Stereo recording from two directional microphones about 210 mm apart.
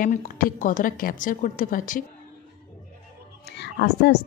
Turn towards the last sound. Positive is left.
turn(degrees=50)  # may be behind; listen again after turning